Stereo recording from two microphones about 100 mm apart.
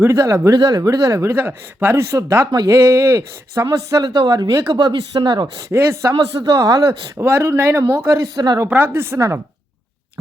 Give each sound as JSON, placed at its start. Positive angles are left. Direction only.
{"t": 0.0, "sound": "speech", "side_deg": -30}
{"t": 5.6, "sound": "speech", "side_deg": -25}
{"t": 7.2, "sound": "speech", "side_deg": -25}
{"t": 8.0, "sound": "speech", "side_deg": -35}
{"t": 8.5, "sound": "speech", "side_deg": -20}